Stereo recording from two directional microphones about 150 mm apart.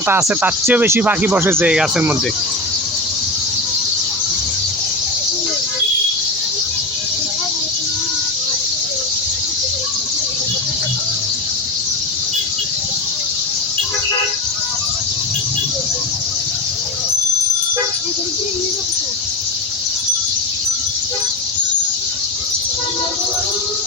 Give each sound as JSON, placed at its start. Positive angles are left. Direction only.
{"t": 0.1, "sound": "speech", "side_deg": -15}